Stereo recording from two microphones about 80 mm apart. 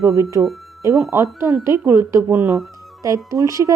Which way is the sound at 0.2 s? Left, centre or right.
Right.